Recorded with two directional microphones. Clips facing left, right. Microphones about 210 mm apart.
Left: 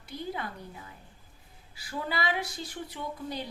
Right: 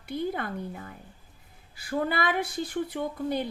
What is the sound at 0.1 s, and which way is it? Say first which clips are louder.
Speech: right 6 dB; 55° right (ahead or behind).